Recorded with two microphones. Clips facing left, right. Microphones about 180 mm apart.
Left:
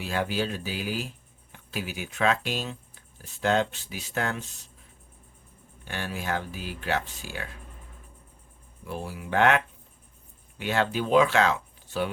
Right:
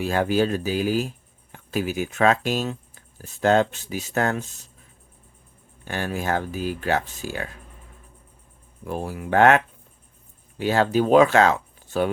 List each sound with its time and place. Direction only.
0.0 s speech: 45° right (ahead or behind)
5.8 s speech: 45° right (ahead or behind)
8.8 s speech: 45° right (ahead or behind)